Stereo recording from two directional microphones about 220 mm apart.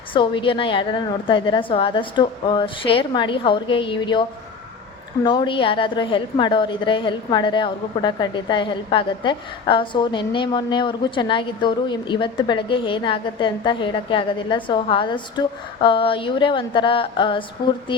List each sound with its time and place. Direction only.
0.1 s a woman's voice: 20° left (ahead or behind)